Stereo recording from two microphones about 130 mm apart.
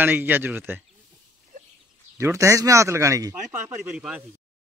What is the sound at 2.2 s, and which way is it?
Speech, 25° right (ahead or behind).